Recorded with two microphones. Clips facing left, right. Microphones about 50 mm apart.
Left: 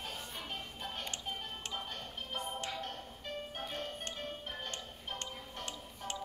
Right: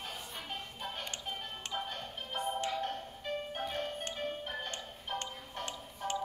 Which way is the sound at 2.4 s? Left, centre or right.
Centre.